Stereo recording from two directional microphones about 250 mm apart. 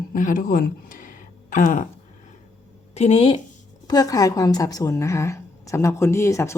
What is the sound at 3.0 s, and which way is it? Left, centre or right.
A woman's voice, left.